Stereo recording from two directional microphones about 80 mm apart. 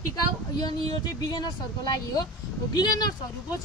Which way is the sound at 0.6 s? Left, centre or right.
Left.